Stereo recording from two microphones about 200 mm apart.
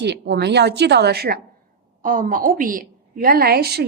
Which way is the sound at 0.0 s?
60° right (ahead or behind).